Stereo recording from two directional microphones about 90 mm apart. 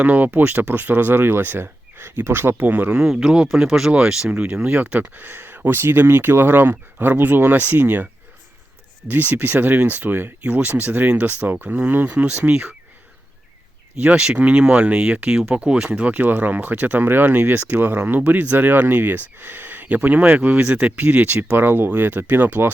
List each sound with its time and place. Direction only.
0.0 s speech: 15° right (ahead or behind)
9.0 s speech: 20° right (ahead or behind)
14.0 s speech: 15° right (ahead or behind)